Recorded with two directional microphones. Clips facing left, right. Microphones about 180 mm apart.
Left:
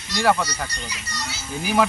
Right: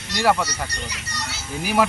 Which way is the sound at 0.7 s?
65° right (ahead or behind).